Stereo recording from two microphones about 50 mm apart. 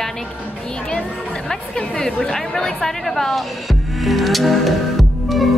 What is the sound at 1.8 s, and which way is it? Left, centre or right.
Speech, centre.